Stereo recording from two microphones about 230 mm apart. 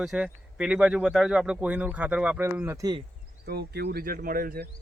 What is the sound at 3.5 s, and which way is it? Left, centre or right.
Speech, right.